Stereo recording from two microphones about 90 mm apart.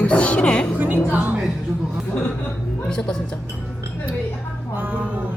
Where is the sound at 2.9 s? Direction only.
5° left (ahead or behind).